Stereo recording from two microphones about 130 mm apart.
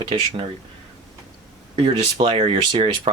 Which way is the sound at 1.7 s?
45° right (ahead or behind).